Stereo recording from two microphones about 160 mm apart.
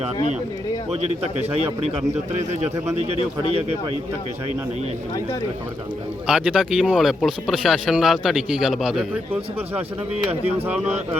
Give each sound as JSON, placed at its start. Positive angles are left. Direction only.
{"t": 2.5, "sound": "speech", "side_deg": -45}
{"t": 6.2, "sound": "speech", "side_deg": -5}